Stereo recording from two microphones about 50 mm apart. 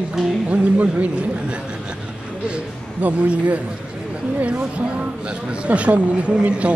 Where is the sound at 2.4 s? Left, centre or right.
Right.